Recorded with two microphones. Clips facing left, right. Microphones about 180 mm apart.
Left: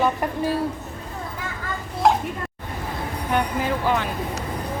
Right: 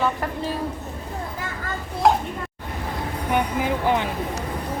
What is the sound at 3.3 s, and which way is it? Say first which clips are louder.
Speech: even; 15° right (ahead or behind).